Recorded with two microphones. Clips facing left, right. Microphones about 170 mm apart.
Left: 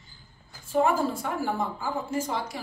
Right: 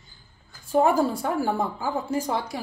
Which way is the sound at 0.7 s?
35° right (ahead or behind).